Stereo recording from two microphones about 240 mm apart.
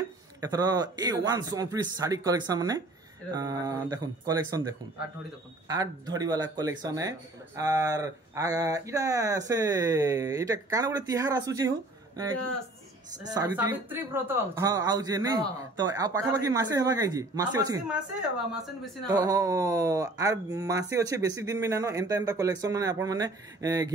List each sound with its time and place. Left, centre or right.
0.4 s speech: centre
13.2 s speech: centre
19.0 s speech: centre